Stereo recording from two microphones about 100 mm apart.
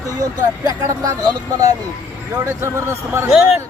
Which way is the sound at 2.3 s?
25° right (ahead or behind).